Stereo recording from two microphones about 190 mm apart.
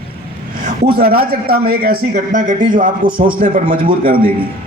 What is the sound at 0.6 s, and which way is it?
A man's voice, 50° right (ahead or behind).